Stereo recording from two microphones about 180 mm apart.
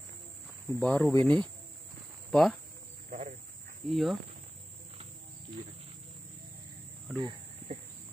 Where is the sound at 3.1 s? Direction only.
40° right (ahead or behind).